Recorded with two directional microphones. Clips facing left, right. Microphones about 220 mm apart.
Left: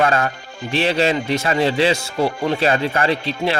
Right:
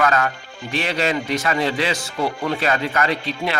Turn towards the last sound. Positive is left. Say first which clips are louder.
# left 4 dB
turn(degrees=30)  # may be behind; listen again after turning